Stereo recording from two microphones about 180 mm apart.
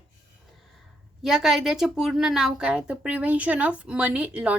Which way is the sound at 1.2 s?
Centre (ahead or behind).